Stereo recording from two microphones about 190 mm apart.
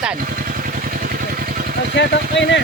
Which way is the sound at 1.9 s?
65° left (ahead or behind).